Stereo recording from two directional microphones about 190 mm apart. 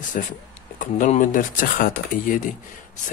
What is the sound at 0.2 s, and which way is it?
Speech, 45° left (ahead or behind).